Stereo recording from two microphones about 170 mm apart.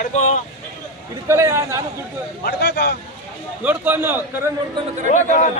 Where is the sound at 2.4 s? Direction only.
70° left (ahead or behind).